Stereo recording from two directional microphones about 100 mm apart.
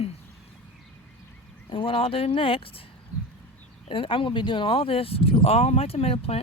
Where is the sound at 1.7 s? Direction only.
60° left (ahead or behind).